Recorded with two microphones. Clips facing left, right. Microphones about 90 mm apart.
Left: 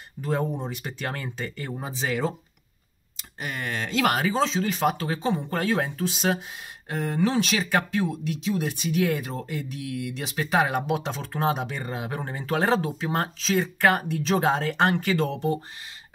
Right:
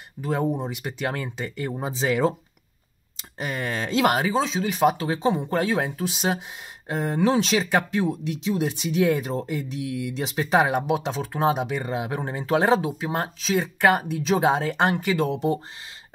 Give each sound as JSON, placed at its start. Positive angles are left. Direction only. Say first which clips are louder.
{"t": 0.2, "sound": "speech", "louder": "right 2 dB", "side_deg": -10}
{"t": 3.6, "sound": "speech", "louder": "right 3 dB", "side_deg": -20}